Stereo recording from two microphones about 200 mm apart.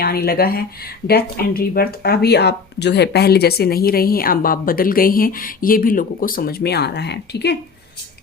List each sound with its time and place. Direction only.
0.0 s speech: 50° left (ahead or behind)